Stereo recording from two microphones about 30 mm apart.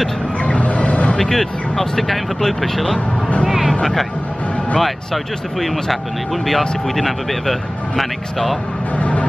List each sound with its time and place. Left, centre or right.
0.4 s vehicle: left
1.1 s speech: centre
3.4 s vehicle: centre
4.7 s speech: centre
8.9 s vehicle: left